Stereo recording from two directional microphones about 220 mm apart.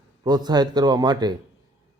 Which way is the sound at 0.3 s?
20° right (ahead or behind).